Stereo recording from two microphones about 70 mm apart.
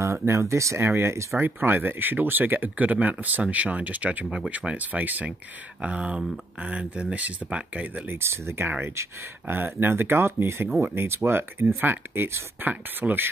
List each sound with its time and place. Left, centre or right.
0.0 s speech: right
8.2 s speech: right